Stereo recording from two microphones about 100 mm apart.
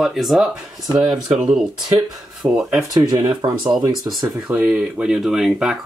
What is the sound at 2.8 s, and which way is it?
Speech, 40° right (ahead or behind).